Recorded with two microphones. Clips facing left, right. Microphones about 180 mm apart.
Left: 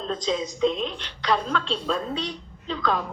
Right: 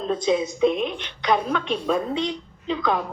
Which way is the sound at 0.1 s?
10° right (ahead or behind).